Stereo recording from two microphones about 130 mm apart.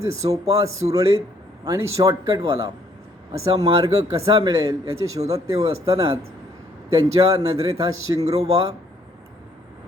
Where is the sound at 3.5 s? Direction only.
30° right (ahead or behind).